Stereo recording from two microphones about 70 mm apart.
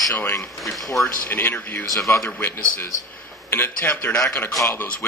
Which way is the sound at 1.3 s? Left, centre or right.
Left.